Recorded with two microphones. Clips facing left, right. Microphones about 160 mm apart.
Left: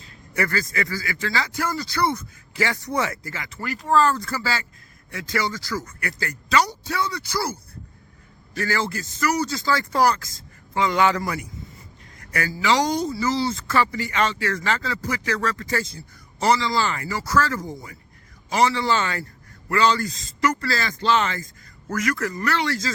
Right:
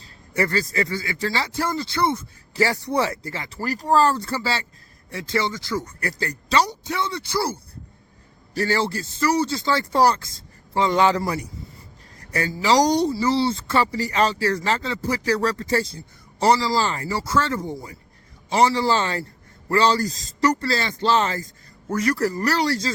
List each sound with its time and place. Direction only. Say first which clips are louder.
0.0 s speech: right 2 dB; 30° right (ahead or behind)
2.5 s a man's voice: right 3 dB; 35° right (ahead or behind)